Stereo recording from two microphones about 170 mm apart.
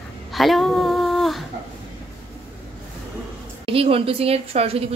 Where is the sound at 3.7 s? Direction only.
35° right (ahead or behind).